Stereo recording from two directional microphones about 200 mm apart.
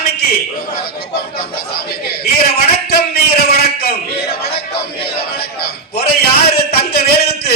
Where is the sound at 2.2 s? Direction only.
50° left (ahead or behind).